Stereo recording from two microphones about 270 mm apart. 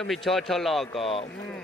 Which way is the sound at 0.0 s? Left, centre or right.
Centre.